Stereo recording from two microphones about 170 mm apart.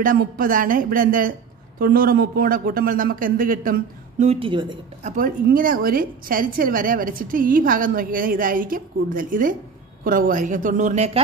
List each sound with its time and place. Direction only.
0.0 s a woman's voice: 55° right (ahead or behind)
4.3 s speech: 30° right (ahead or behind)
5.0 s a woman's voice: 55° right (ahead or behind)